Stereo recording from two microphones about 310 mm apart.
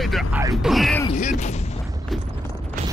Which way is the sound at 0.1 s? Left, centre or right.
Centre.